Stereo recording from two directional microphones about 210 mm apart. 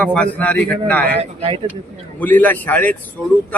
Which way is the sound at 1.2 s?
25° right (ahead or behind).